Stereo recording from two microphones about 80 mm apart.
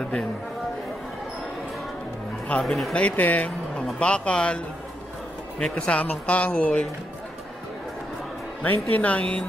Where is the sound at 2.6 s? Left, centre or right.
Centre.